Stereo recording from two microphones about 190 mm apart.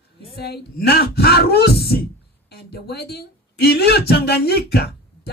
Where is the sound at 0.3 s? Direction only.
55° left (ahead or behind).